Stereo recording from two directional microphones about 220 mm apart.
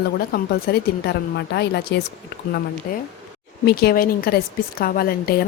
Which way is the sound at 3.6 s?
45° left (ahead or behind).